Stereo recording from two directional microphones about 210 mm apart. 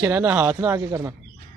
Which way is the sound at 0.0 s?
10° right (ahead or behind).